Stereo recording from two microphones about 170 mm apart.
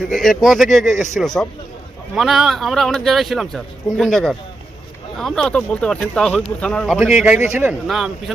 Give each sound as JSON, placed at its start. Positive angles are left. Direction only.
{"t": 0.1, "sound": "a man's voice", "side_deg": 0}
{"t": 7.3, "sound": "a man's voice", "side_deg": 40}
{"t": 7.6, "sound": "a man's voice", "side_deg": -5}